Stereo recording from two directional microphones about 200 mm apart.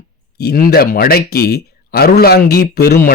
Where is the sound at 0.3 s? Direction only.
50° left (ahead or behind).